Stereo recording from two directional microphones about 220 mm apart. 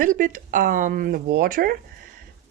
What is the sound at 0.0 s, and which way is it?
Speech, 35° right (ahead or behind).